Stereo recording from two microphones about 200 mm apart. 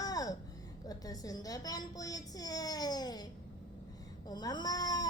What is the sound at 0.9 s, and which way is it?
Speech, 20° left (ahead or behind).